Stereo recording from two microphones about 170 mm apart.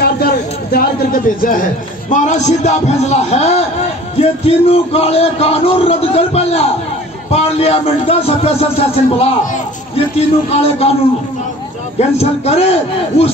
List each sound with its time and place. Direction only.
0.0 s speech: 65° left (ahead or behind); by 10.9 s 40° left (ahead or behind)
12.0 s speech: 40° left (ahead or behind)